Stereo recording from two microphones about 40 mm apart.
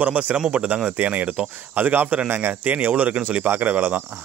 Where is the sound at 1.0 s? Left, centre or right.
Right.